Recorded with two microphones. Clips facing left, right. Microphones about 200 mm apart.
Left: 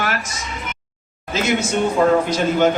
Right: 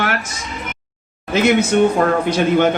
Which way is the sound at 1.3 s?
60° right (ahead or behind).